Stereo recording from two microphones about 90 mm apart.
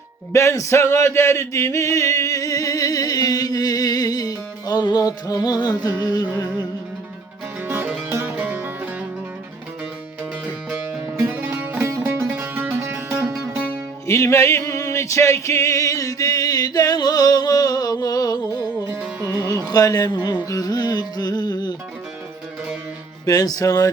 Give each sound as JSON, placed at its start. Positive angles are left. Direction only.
{"t": 0.3, "sound": "male singing", "side_deg": 35}
{"t": 7.7, "sound": "music", "side_deg": -20}
{"t": 11.0, "sound": "music", "side_deg": -30}
{"t": 14.1, "sound": "male singing", "side_deg": 30}
{"t": 19.2, "sound": "music", "side_deg": -35}
{"t": 19.5, "sound": "music", "side_deg": 45}
{"t": 23.2, "sound": "music", "side_deg": 45}